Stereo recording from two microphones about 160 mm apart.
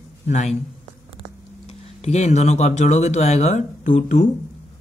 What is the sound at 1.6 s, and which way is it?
Speech, 45° left (ahead or behind).